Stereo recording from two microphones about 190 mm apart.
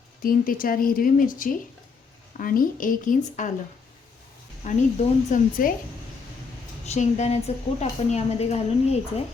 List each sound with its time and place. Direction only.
0.2 s a woman's voice: 50° left (ahead or behind)
4.6 s a woman's voice: 40° left (ahead or behind)
6.8 s a woman's voice: 35° left (ahead or behind)